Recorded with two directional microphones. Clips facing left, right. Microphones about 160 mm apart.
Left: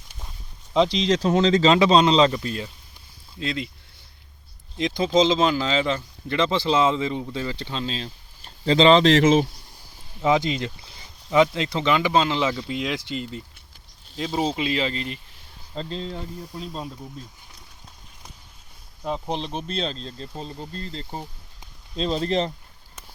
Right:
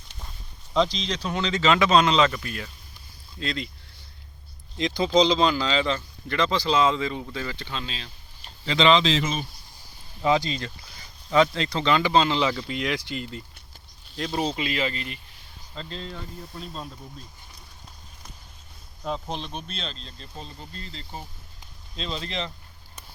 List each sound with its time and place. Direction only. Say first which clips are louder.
1.0 s speech: left 9 dB; 40° left (ahead or behind); by 3.7 s 20° left (ahead or behind)
5.1 s speech: left 1 dB; 20° left (ahead or behind); by 9.0 s 40° left (ahead or behind)
9.0 s speech: left 10 dB; 80° left
10.2 s speech: left 2 dB; 20° left (ahead or behind)
16.6 s speech: left 4 dB; 10° left (ahead or behind)
19.0 s speech: left 3 dB; 15° left (ahead or behind)
19.4 s speech: left 7 dB; 30° left (ahead or behind)